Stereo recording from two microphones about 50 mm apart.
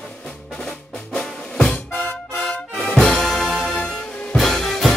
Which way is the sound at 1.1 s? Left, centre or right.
Centre.